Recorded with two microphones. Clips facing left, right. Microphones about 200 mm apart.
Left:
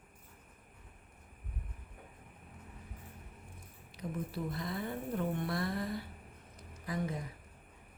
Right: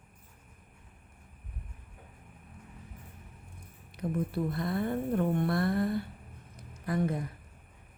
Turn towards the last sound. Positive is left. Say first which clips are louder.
# right 7 dB
turn(degrees=-60)  # may be behind; listen again after turning